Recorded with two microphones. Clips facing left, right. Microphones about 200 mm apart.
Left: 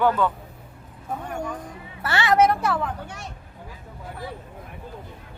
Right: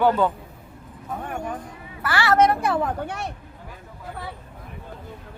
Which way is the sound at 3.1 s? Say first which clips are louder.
Right 7 dB; 60° right (ahead or behind).